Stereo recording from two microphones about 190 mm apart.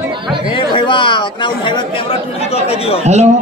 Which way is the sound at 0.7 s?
25° left (ahead or behind).